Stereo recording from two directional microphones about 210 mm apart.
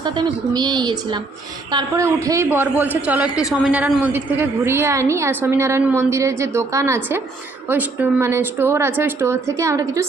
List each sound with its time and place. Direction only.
0.0 s a woman's voice: 20° right (ahead or behind)